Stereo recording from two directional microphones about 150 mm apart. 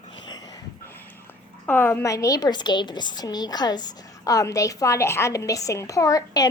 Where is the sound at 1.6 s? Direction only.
15° left (ahead or behind).